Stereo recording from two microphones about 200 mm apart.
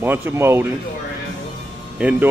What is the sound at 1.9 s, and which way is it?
Speech, 5° right (ahead or behind).